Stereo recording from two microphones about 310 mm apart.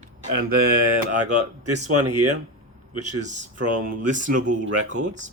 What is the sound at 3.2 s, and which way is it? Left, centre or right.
Speech, right.